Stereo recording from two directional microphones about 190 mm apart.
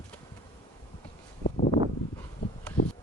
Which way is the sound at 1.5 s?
50° left (ahead or behind).